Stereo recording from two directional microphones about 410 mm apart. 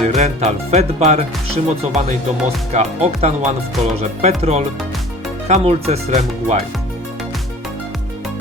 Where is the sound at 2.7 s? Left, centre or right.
Centre.